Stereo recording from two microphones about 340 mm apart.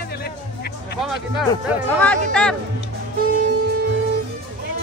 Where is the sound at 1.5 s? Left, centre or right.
Centre.